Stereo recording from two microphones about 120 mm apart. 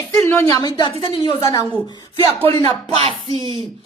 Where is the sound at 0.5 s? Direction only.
35° left (ahead or behind).